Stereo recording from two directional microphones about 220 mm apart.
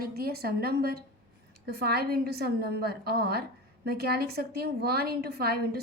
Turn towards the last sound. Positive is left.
turn(degrees=-45)  # may be behind; listen again after turning